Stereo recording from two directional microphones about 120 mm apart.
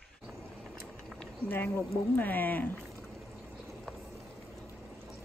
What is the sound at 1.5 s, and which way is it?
Speech, 15° left (ahead or behind).